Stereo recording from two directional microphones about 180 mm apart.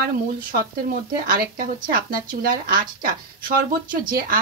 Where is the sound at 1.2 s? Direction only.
50° right (ahead or behind).